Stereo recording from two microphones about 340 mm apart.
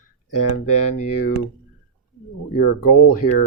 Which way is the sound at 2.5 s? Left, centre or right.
Left.